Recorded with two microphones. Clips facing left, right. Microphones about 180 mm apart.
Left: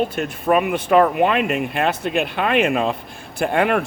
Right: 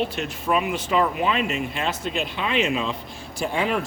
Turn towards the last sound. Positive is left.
turn(degrees=60)  # may be behind; listen again after turning